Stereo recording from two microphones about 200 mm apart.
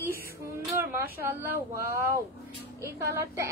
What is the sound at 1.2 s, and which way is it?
Speech, 10° right (ahead or behind).